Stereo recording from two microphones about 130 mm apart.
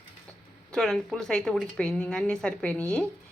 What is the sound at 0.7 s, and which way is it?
A woman's voice, 5° left (ahead or behind).